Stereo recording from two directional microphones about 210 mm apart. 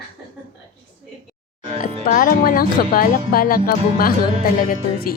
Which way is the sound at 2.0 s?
40° left (ahead or behind).